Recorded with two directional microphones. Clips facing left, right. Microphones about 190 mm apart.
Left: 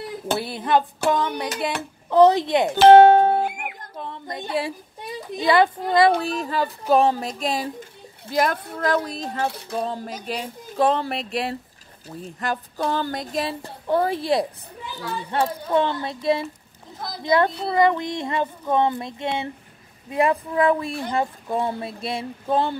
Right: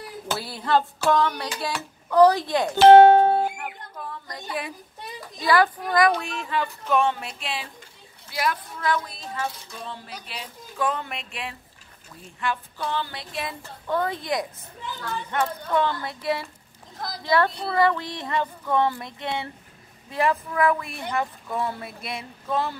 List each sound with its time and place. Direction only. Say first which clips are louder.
0.3 s child singing: left 2 dB; 20° left (ahead or behind)
2.8 s speech: left 1 dB; 60° left (ahead or behind)
3.5 s a sound: left 2 dB; 20° left (ahead or behind)
4.5 s child singing: left 6 dB; 30° left (ahead or behind)
6.9 s speech: left 5 dB; 35° left (ahead or behind)
9.4 s a sound: left 4 dB; 60° left (ahead or behind)
9.8 s speech: left 10 dB; 40° left (ahead or behind)
14.2 s child singing: left 6 dB; 30° left (ahead or behind)
15.0 s speech: left 3 dB; 10° left (ahead or behind)
15.4 s child singing: left 3 dB; 15° left (ahead or behind)